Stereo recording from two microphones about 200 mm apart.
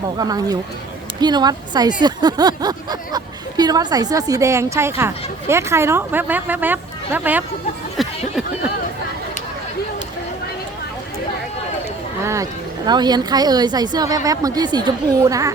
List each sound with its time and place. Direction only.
0.2 s speech: 20° right (ahead or behind)
8.0 s a sound: centre (ahead or behind)
12.2 s speech: 15° right (ahead or behind)